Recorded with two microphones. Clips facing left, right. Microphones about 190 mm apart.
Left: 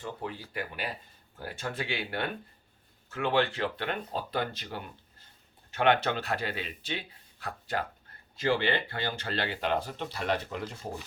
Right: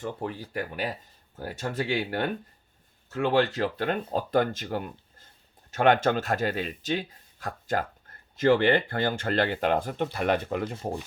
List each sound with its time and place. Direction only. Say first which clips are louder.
0.0 s speech: right 5 dB; 45° right (ahead or behind)